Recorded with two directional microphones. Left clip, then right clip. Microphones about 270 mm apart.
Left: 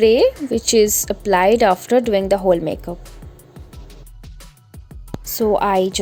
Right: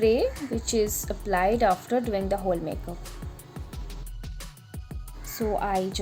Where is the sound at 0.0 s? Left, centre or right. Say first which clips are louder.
Left 10 dB; left.